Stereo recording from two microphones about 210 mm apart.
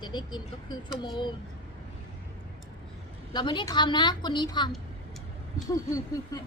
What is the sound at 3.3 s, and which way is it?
A woman's voice, 20° left (ahead or behind).